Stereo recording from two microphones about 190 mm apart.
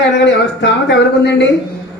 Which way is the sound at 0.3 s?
65° left (ahead or behind).